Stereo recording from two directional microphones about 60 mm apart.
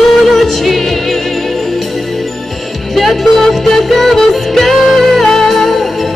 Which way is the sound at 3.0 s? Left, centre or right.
Centre.